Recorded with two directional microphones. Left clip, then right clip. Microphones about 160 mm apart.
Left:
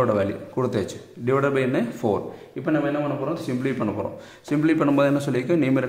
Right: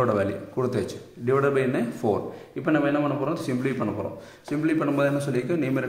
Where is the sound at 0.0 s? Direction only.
15° left (ahead or behind).